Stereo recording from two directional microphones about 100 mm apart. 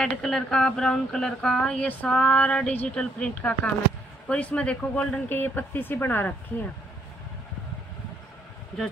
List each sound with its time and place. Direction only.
0.0 s speech: 5° left (ahead or behind); by 6.3 s 20° left (ahead or behind)